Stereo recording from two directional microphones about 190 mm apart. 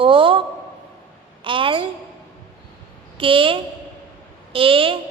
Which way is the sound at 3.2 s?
25° right (ahead or behind).